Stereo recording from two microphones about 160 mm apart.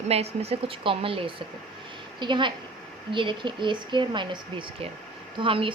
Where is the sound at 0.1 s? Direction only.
40° right (ahead or behind).